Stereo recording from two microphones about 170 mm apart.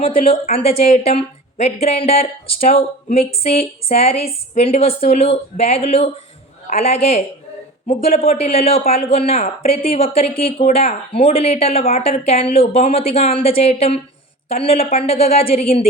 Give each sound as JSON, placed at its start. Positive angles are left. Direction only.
{"t": 0.3, "sound": "a woman's voice", "side_deg": 35}